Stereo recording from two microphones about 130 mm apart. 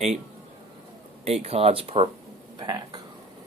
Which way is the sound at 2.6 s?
30° right (ahead or behind).